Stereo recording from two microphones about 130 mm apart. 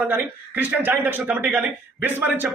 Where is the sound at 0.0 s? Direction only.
15° right (ahead or behind).